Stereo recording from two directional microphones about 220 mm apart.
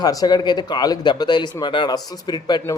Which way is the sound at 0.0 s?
15° left (ahead or behind).